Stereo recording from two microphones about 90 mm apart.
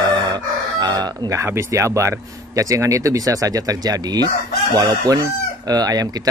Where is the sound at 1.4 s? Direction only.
30° right (ahead or behind).